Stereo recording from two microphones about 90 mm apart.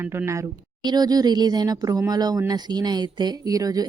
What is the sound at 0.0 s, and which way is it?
Speech, 25° right (ahead or behind).